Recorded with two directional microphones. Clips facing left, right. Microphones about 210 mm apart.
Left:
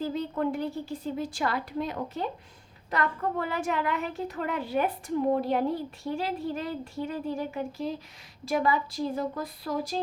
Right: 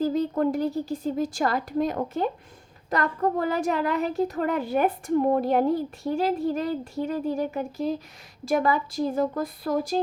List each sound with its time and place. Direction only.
0.0 s a woman's voice: 40° right (ahead or behind)